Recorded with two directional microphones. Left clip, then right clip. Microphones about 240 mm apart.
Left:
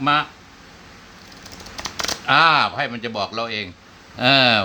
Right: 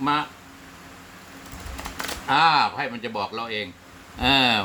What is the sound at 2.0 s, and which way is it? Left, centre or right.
A man's voice, left.